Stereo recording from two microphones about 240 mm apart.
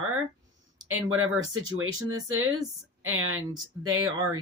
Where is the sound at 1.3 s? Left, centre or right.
Right.